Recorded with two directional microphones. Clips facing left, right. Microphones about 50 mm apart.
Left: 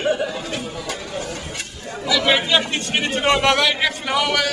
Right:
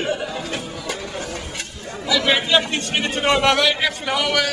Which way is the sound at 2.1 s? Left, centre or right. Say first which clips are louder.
Even; centre.